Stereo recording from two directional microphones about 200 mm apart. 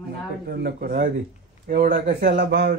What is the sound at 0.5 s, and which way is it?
Speech, 50° right (ahead or behind).